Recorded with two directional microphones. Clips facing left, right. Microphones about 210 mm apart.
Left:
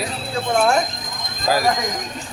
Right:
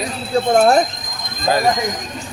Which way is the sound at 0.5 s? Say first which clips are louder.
Right 4 dB; 35° right (ahead or behind).